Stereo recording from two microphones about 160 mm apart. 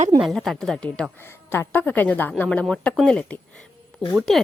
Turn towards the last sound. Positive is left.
turn(degrees=0)  # may be behind; listen again after turning